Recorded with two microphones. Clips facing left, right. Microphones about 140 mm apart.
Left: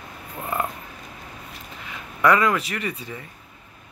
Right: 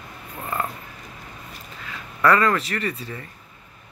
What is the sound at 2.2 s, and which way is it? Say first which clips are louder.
Speech: even; 10° left (ahead or behind).